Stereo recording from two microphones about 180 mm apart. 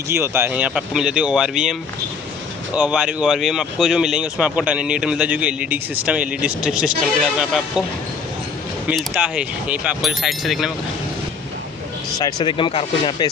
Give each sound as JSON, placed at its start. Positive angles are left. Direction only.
{"t": 0.1, "sound": "speech", "side_deg": -15}
{"t": 8.8, "sound": "speech", "side_deg": -5}
{"t": 12.2, "sound": "speech", "side_deg": 25}